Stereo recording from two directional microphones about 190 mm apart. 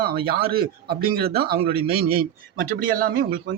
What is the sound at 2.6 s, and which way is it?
Speech, 50° right (ahead or behind).